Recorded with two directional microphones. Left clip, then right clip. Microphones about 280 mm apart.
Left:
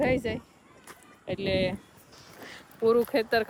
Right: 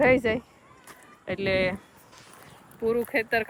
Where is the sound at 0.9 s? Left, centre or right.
Centre.